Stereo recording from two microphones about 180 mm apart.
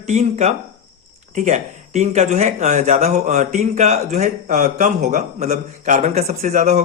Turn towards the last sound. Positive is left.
turn(degrees=-45)  # may be behind; listen again after turning